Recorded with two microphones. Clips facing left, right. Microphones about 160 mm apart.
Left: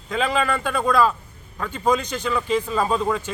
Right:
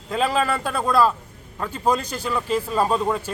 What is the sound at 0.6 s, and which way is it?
A man's voice, 5° right (ahead or behind).